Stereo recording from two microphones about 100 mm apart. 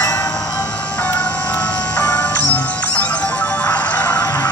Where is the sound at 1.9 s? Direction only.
10° left (ahead or behind).